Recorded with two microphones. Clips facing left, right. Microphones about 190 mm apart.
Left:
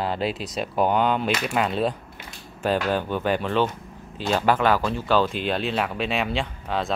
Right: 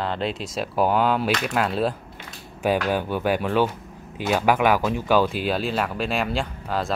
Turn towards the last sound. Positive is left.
turn(degrees=0)  # may be behind; listen again after turning